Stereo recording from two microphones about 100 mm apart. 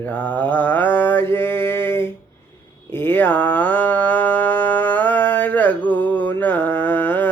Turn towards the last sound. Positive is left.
turn(degrees=20)  # may be behind; listen again after turning